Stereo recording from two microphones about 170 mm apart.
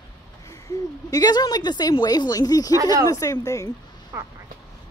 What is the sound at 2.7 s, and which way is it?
Speech, 15° right (ahead or behind).